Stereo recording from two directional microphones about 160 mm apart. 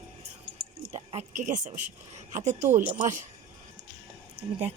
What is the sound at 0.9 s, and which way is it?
A woman's voice, 50° right (ahead or behind).